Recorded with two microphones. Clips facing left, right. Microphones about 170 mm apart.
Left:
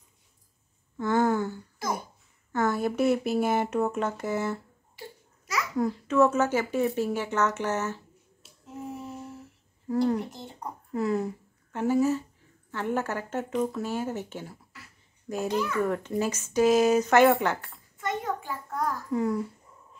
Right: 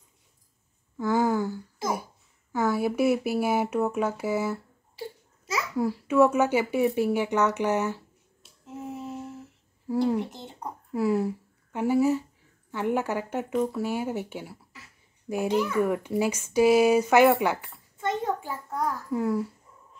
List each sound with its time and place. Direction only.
0.9 s a sound: 10° right (ahead or behind)
2.5 s a child's voice: 10° right (ahead or behind)
5.8 s a child's voice: 10° right (ahead or behind)
8.6 s a sound: 20° right (ahead or behind)
9.8 s a child's voice: 5° right (ahead or behind)
10.3 s a child's voice: 20° right (ahead or behind)
10.9 s a child's voice: 5° right (ahead or behind)
17.9 s a sound: 25° right (ahead or behind)
18.7 s a child's voice: 5° right (ahead or behind)